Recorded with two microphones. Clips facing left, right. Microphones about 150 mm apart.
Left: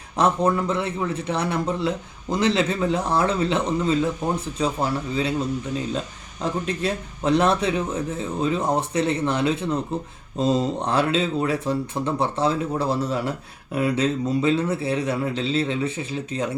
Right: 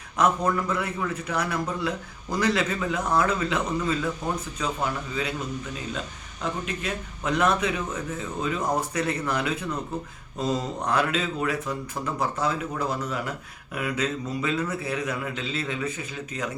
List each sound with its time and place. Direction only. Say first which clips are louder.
0.2 s a man's voice: left 3 dB; 25° left (ahead or behind)
6.4 s a man's voice: left 5 dB; 35° left (ahead or behind)